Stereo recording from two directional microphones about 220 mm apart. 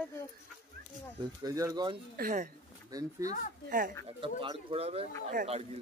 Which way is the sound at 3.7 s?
40° right (ahead or behind).